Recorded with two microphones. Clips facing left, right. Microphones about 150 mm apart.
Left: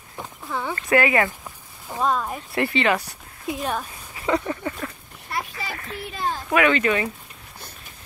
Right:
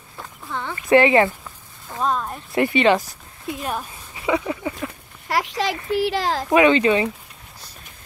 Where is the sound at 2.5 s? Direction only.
20° right (ahead or behind).